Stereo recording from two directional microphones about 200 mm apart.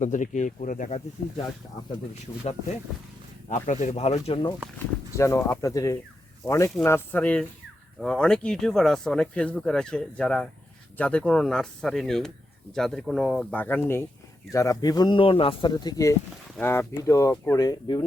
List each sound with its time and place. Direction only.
0.0 s speech: 40° left (ahead or behind)
3.5 s speech: 40° left (ahead or behind)
5.1 s speech: 15° left (ahead or behind)